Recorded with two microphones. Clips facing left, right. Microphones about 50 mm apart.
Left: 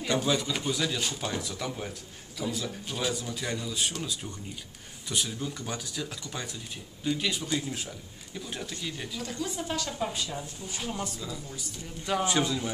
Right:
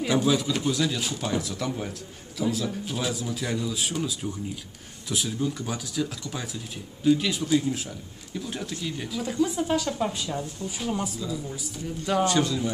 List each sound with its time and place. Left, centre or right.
0.0 s a woman's voice: centre
12.3 s a man's voice: centre